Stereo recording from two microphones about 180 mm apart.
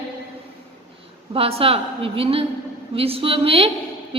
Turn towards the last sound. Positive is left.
turn(degrees=-30)  # may be behind; listen again after turning